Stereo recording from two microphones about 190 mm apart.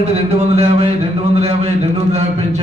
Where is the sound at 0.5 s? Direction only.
35° right (ahead or behind).